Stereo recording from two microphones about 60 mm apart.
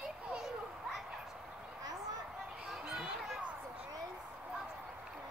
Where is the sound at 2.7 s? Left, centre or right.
Centre.